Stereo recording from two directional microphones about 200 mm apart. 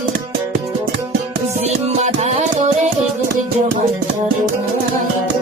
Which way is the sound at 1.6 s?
35° right (ahead or behind).